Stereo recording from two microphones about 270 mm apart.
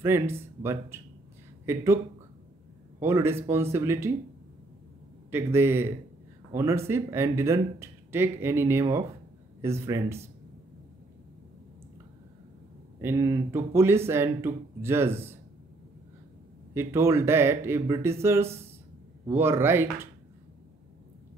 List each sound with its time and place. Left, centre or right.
0.0 s speech: centre
3.0 s speech: centre
5.3 s speech: centre
13.0 s speech: centre
16.7 s speech: centre